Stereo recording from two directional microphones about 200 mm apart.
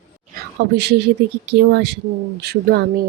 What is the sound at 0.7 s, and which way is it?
Speech, 55° right (ahead or behind).